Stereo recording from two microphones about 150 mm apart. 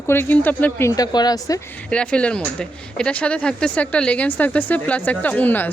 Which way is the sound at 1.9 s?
5° left (ahead or behind).